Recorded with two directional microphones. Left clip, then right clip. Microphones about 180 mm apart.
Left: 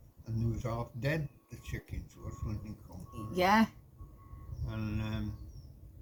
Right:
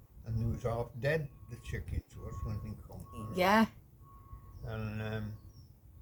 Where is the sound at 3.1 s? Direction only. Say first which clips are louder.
Left 1 dB; 40° right (ahead or behind).